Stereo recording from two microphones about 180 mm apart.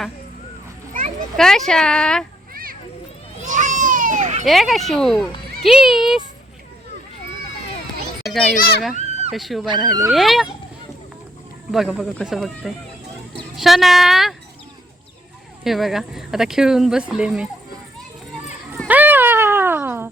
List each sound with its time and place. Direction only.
1.4 s speech: centre (ahead or behind)
2.5 s children playing: 50° right (ahead or behind)
3.4 s a sound: 45° right (ahead or behind)
4.4 s speech: centre (ahead or behind)
8.5 s a child's voice: 55° left (ahead or behind)
9.3 s speech: centre (ahead or behind)
9.6 s speech: 25° right (ahead or behind)
10.1 s speech: centre (ahead or behind)
11.7 s speech: centre (ahead or behind)
15.6 s speech: centre (ahead or behind)
18.9 s a sound: 10° right (ahead or behind)